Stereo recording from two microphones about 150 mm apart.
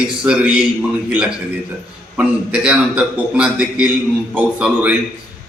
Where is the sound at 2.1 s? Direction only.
5° right (ahead or behind).